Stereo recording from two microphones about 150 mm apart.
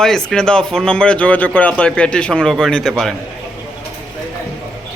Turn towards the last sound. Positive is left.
turn(degrees=0)  # may be behind; listen again after turning